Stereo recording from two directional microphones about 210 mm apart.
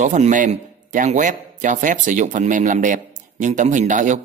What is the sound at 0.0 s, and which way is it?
A man's voice, 35° right (ahead or behind).